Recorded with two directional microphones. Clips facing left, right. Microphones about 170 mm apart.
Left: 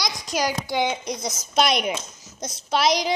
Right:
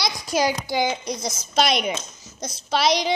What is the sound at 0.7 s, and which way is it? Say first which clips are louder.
A woman's voice: right 1 dB; centre (ahead or behind).